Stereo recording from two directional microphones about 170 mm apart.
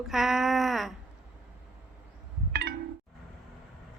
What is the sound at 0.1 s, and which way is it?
Speech, centre (ahead or behind).